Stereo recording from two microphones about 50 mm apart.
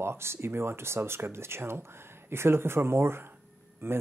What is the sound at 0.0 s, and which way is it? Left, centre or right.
Speech, right.